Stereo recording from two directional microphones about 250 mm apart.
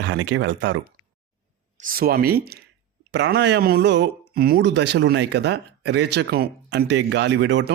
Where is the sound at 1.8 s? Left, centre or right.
Right.